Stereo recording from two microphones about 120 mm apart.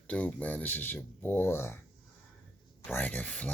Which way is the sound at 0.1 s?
10° left (ahead or behind).